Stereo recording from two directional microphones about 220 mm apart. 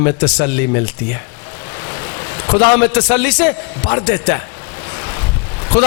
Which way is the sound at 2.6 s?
10° left (ahead or behind).